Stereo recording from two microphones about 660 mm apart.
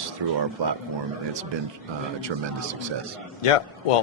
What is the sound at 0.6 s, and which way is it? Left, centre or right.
Speech, right.